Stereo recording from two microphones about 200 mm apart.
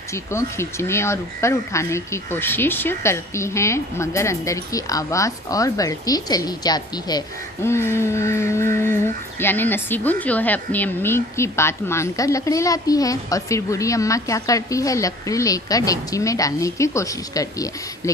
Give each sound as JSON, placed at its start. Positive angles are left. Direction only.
{"t": 0.1, "sound": "speech", "side_deg": 15}